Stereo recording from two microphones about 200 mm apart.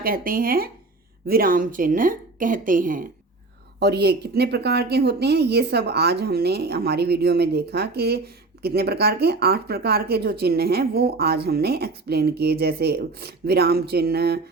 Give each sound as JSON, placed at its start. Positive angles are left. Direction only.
{"t": 0.0, "sound": "speech", "side_deg": -45}
{"t": 3.8, "sound": "speech", "side_deg": -55}